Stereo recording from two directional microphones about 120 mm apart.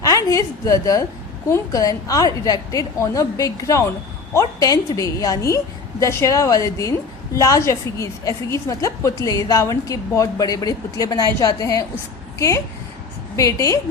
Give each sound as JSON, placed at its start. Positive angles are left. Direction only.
{"t": 0.0, "sound": "a woman's voice", "side_deg": 30}